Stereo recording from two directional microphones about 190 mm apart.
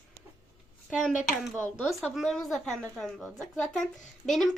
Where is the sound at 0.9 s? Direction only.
Centre (ahead or behind).